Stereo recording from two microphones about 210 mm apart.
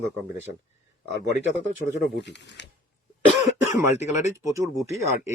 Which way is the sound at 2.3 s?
55° left (ahead or behind).